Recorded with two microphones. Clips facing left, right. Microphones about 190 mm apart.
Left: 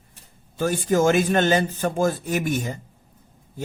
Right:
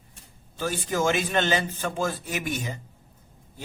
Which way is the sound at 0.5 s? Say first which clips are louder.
Left 7 dB; 50° left (ahead or behind).